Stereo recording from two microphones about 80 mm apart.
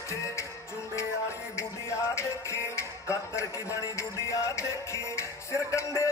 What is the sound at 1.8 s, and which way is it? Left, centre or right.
Music, left.